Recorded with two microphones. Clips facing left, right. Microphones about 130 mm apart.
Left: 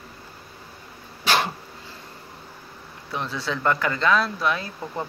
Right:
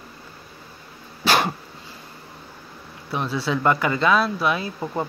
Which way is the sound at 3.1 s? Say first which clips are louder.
Right 4 dB; 10° right (ahead or behind).